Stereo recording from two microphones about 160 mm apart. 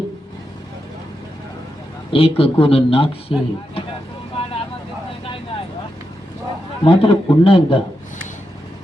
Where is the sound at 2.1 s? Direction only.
35° left (ahead or behind).